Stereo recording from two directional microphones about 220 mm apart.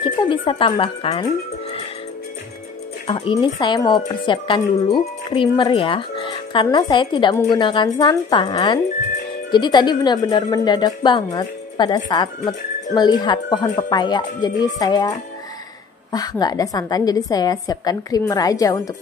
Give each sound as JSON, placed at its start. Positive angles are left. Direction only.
{"t": 0.0, "sound": "speech", "side_deg": 20}
{"t": 3.1, "sound": "a woman's voice", "side_deg": 20}